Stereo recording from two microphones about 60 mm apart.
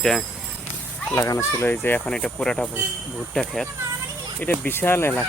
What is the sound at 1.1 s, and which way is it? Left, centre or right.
Speech, left.